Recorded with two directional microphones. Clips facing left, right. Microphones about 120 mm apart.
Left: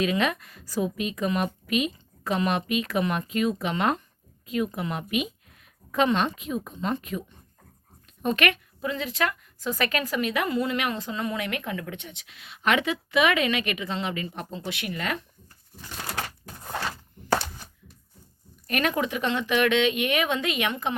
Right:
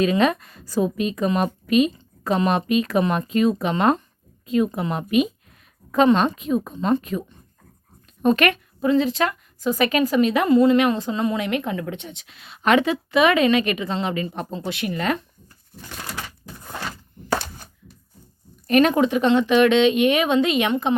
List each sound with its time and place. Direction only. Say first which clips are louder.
0.0 s a woman's voice: right 6 dB; 35° right (ahead or behind)
18.7 s speech: right 9 dB; 30° right (ahead or behind)